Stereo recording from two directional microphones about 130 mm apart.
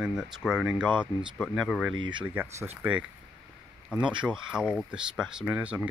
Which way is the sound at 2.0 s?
40° right (ahead or behind).